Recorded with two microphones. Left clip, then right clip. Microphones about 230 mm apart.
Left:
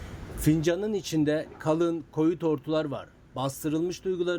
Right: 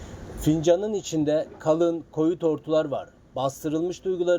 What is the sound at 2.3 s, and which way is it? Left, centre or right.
A man's voice, left.